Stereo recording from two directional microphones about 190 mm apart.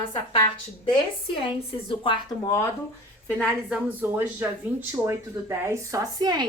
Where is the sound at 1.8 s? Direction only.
25° left (ahead or behind).